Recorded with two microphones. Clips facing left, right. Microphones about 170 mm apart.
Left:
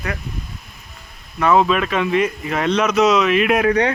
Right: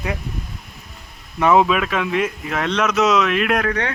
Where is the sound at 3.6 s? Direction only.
15° left (ahead or behind).